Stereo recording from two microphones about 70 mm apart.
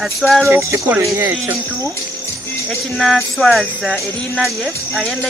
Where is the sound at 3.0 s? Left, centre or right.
Centre.